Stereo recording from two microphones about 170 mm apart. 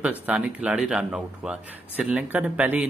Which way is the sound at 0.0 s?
10° right (ahead or behind).